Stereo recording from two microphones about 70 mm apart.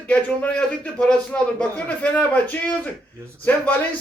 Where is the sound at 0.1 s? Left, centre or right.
Centre.